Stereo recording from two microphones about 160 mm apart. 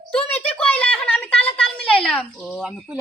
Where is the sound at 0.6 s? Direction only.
10° left (ahead or behind).